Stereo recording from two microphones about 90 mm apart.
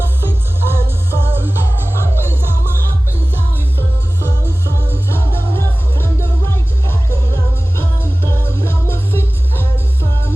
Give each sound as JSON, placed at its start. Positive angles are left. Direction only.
{"t": 0.3, "sound": "music", "side_deg": -25}
{"t": 4.2, "sound": "music", "side_deg": -25}
{"t": 5.0, "sound": "music", "side_deg": 25}
{"t": 7.8, "sound": "music", "side_deg": 30}